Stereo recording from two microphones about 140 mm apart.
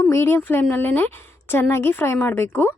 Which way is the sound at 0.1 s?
20° left (ahead or behind).